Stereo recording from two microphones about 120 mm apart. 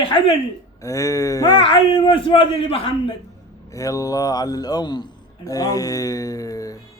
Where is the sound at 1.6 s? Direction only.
45° left (ahead or behind).